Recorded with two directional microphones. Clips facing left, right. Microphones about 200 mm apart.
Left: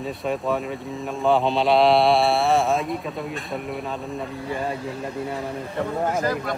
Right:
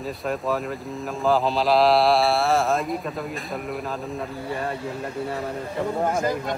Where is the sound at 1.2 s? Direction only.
Centre (ahead or behind).